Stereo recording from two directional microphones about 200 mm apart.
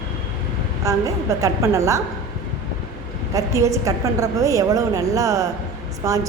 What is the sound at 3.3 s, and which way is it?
A woman's voice, 15° right (ahead or behind).